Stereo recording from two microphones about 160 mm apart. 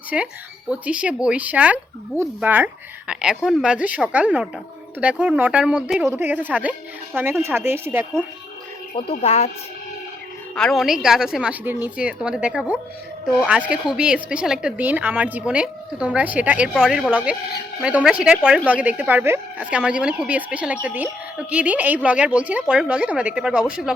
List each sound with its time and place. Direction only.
0.1 s a woman's voice: 5° right (ahead or behind)
9.0 s speech: 40° left (ahead or behind)
10.5 s a woman's voice: 5° left (ahead or behind)